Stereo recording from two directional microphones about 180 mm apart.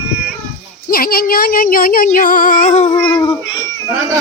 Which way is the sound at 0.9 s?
55° left (ahead or behind).